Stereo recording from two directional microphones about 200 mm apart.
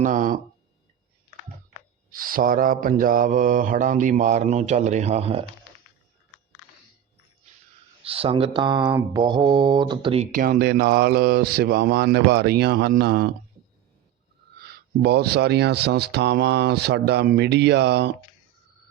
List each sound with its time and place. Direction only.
0.0 s mantra: 40° right (ahead or behind)
2.0 s mantra: 45° right (ahead or behind)
8.0 s mantra: 30° right (ahead or behind)
8.9 s mantra: 10° right (ahead or behind)
9.2 s mantra: 20° right (ahead or behind)
10.3 s speech: 45° right (ahead or behind)
14.6 s speech: 50° right (ahead or behind)